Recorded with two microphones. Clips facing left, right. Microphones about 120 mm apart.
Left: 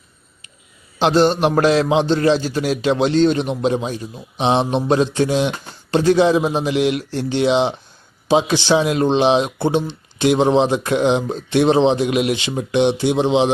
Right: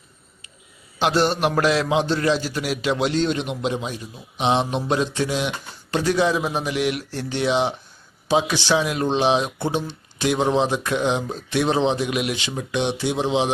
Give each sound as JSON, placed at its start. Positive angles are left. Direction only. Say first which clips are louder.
{"t": 0.9, "sound": "speech", "louder": "left 5 dB", "side_deg": 25}